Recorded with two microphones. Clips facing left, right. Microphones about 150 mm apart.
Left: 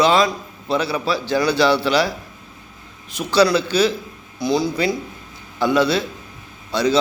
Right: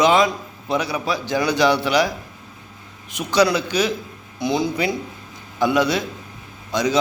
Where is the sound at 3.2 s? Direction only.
15° right (ahead or behind).